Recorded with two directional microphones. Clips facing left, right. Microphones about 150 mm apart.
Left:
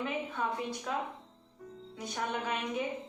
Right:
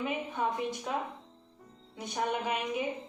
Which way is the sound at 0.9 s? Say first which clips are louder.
Even; 20° right (ahead or behind).